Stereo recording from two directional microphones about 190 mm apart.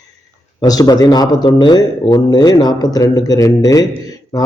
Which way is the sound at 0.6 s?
20° left (ahead or behind).